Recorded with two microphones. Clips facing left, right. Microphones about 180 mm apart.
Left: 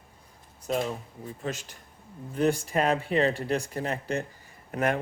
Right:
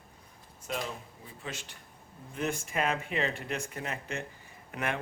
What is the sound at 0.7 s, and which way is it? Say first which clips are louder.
Speech: left 7 dB; 45° left (ahead or behind).